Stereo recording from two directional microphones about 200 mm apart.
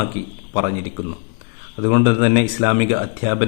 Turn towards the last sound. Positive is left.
turn(degrees=-25)  # may be behind; listen again after turning